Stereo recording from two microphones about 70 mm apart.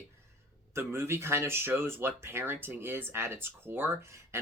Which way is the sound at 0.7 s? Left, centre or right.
Right.